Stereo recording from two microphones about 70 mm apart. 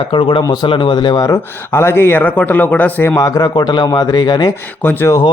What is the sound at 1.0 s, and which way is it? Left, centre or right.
Speech, left.